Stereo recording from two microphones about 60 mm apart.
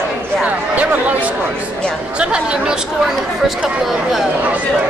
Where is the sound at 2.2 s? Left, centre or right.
Centre.